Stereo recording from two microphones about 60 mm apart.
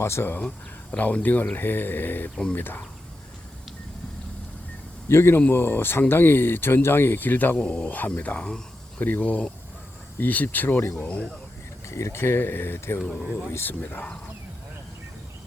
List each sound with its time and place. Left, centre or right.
0.0 s speech: left
0.4 s speech: left
2.3 s speech: centre
2.6 s speech: left
5.0 s speech: left
7.6 s speech: centre
11.9 s speech: left